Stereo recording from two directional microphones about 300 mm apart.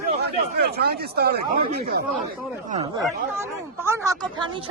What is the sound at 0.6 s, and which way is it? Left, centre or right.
Speech, right.